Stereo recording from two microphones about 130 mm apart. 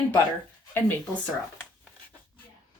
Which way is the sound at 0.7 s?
15° left (ahead or behind).